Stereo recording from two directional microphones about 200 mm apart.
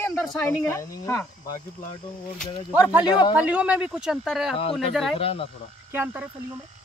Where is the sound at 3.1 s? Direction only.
20° left (ahead or behind).